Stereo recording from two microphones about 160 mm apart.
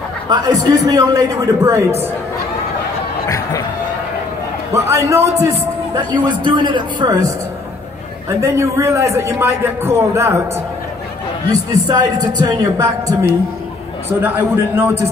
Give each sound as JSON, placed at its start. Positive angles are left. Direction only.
{"t": 0.3, "sound": "a man's voice", "side_deg": -25}
{"t": 3.3, "sound": "music", "side_deg": 20}
{"t": 4.7, "sound": "a man's voice", "side_deg": -20}
{"t": 5.9, "sound": "a man's voice", "side_deg": -30}
{"t": 8.3, "sound": "a man's voice", "side_deg": -20}
{"t": 11.7, "sound": "a man's voice", "side_deg": -25}